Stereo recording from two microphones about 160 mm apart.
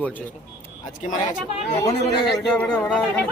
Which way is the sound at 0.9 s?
55° left (ahead or behind).